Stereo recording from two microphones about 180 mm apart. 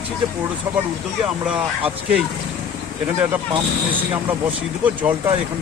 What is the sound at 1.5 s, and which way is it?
Speech, 5° right (ahead or behind).